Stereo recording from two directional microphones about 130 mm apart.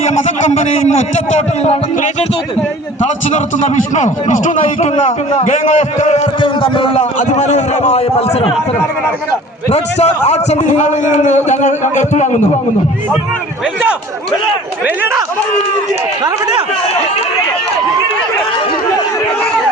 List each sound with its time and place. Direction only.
1.4 s a man's voice: 60° left (ahead or behind)
6.4 s a man's voice: 40° left (ahead or behind)
6.9 s a man's voice: 70° left (ahead or behind)
9.7 s a man's voice: 55° left (ahead or behind)
14.8 s speech: 15° right (ahead or behind)
16.2 s speech: 35° right (ahead or behind)